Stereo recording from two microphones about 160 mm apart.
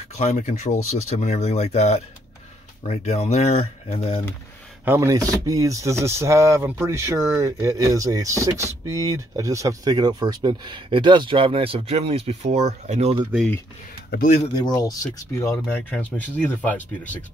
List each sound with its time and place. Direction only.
0.2 s speech: 50° left (ahead or behind)
4.8 s speech: 15° right (ahead or behind); by 13.2 s 45° right (ahead or behind)
14.1 s speech: 55° left (ahead or behind)
14.5 s speech: 25° left (ahead or behind); by 17.2 s 10° left (ahead or behind)